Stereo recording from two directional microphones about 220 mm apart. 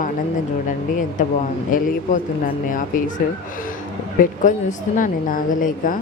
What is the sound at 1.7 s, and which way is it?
Speech, 40° left (ahead or behind).